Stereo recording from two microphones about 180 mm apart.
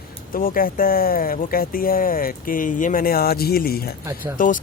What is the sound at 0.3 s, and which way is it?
Speech, 50° left (ahead or behind).